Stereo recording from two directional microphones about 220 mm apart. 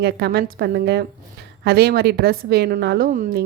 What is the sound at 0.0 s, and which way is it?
A woman's voice, 50° right (ahead or behind).